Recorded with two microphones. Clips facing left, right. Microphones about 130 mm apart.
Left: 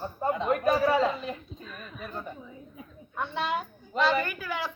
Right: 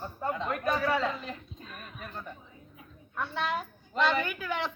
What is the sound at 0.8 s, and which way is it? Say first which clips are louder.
Speech: left 4 dB; 25° left (ahead or behind).